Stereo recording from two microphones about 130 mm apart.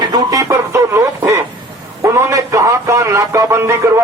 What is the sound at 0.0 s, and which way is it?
Music, 35° right (ahead or behind).